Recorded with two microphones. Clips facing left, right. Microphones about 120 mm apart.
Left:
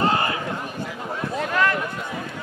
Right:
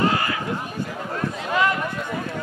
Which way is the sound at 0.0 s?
30° left (ahead or behind).